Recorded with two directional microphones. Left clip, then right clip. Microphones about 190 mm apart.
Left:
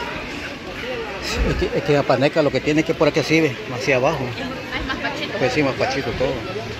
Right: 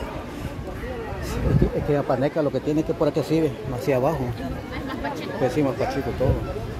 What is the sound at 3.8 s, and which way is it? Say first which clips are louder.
Speech: left 4 dB; 20° right (ahead or behind).